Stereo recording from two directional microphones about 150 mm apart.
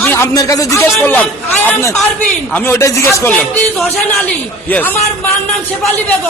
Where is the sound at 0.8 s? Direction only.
10° left (ahead or behind).